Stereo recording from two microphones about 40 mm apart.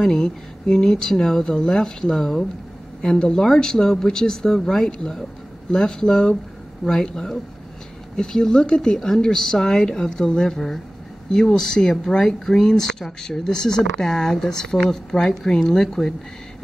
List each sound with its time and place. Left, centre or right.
0.0 s speech: centre
15.1 s speech: centre